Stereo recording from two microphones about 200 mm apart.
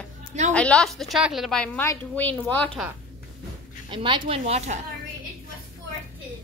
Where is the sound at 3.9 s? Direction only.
25° right (ahead or behind).